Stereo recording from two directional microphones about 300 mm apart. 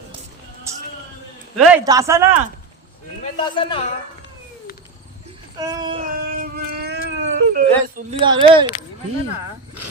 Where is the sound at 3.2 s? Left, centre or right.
Left.